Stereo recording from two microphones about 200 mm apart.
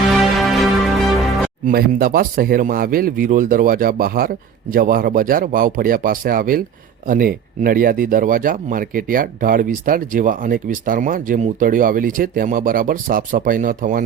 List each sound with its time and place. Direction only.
0.1 s music: centre (ahead or behind)
1.6 s speech: 45° right (ahead or behind)